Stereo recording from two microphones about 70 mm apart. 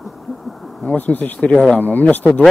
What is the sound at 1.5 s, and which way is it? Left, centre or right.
Speech, centre.